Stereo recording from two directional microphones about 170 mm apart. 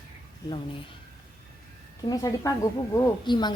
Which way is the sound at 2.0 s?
25° left (ahead or behind).